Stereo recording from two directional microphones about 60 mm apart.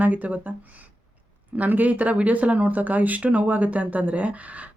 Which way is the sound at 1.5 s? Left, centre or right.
Right.